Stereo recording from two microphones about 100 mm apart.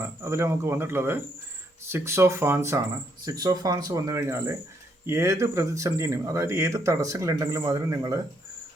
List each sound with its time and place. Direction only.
0.0 s speech: 25° right (ahead or behind)
3.2 s speech: 40° right (ahead or behind)
4.1 s speech: 25° right (ahead or behind)